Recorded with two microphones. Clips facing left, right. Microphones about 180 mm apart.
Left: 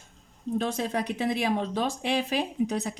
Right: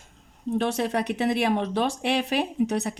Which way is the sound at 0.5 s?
75° right (ahead or behind).